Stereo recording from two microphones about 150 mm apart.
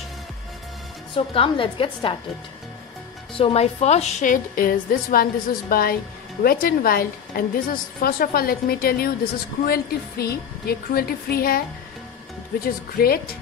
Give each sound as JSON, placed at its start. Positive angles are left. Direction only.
{"t": 1.1, "sound": "a woman's voice", "side_deg": 35}
{"t": 3.3, "sound": "a woman's voice", "side_deg": 40}
{"t": 12.6, "sound": "a woman's voice", "side_deg": 90}